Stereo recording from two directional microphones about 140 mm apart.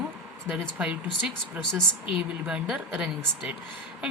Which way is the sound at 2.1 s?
5° right (ahead or behind).